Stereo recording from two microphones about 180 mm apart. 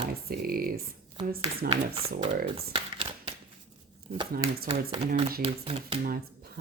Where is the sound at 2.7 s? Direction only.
30° right (ahead or behind).